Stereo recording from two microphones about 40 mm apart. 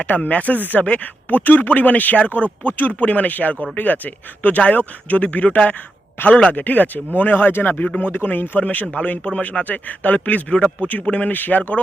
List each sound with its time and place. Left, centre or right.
0.0 s a man's voice: left
1.4 s a man's voice: left
8.6 s a man's voice: left
11.3 s speech: left